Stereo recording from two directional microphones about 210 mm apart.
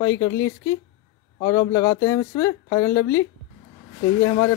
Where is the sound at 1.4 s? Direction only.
15° left (ahead or behind).